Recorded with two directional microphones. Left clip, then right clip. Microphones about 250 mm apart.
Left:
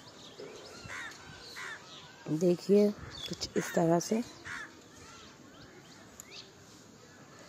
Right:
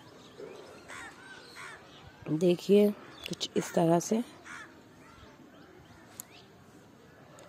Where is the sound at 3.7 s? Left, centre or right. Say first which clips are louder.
Right 2 dB; centre.